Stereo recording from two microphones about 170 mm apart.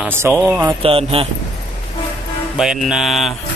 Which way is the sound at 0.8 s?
35° right (ahead or behind).